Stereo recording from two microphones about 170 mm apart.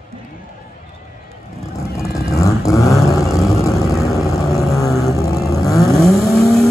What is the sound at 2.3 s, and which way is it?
Vehicle, 20° left (ahead or behind).